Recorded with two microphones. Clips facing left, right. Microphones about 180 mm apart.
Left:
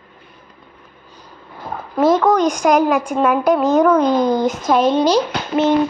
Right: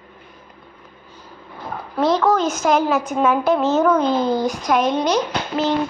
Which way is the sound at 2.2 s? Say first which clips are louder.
Left 3 dB; 15° left (ahead or behind).